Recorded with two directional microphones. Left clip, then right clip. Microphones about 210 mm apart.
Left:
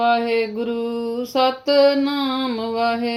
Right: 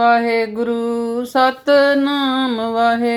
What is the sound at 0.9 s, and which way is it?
Speech, 20° right (ahead or behind).